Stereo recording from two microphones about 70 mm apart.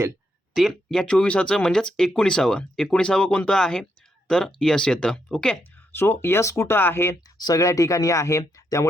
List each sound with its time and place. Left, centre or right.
0.9 s speech: centre
5.9 s speech: left
7.3 s speech: left